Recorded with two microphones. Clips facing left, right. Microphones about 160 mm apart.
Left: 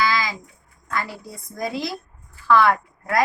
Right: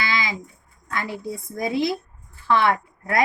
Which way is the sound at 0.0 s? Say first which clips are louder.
Left 4 dB; 25° right (ahead or behind).